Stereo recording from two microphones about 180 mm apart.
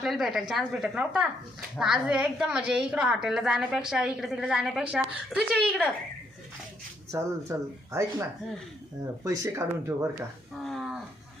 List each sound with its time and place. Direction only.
0.0 s a woman's voice: centre (ahead or behind)
7.1 s speech: 15° right (ahead or behind)
10.6 s a sound: centre (ahead or behind)